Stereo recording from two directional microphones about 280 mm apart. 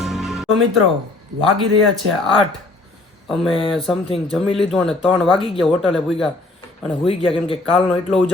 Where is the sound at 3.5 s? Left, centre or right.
Centre.